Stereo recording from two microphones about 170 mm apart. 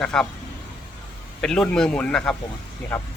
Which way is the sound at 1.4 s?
5° left (ahead or behind).